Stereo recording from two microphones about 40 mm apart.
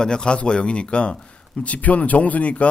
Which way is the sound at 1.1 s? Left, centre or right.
Left.